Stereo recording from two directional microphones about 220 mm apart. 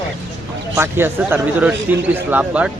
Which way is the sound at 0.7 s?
10° right (ahead or behind).